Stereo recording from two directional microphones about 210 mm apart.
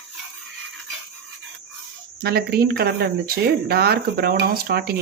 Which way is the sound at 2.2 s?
45° right (ahead or behind).